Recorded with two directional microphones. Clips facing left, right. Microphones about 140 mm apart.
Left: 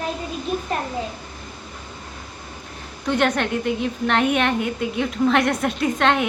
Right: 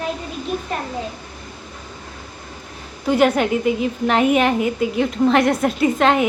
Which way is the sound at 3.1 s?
5° right (ahead or behind).